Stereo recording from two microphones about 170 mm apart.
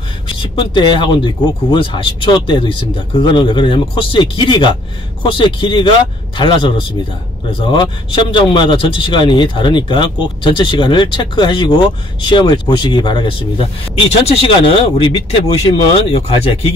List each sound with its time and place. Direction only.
0.4 s speech: 30° left (ahead or behind)